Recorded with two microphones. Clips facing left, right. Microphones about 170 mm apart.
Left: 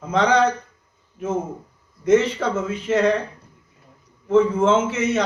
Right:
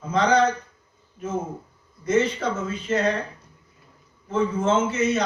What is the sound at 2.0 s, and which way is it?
Speech, 65° left (ahead or behind).